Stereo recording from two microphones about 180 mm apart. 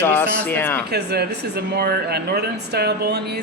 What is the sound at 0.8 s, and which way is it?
Speech, 65° right (ahead or behind).